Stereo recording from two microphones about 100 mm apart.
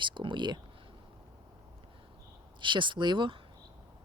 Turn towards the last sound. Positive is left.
turn(degrees=-55)  # may be behind; listen again after turning